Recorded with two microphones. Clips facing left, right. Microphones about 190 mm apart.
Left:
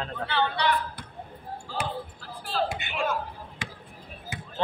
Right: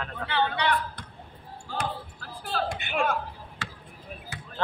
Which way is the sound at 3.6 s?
15° left (ahead or behind).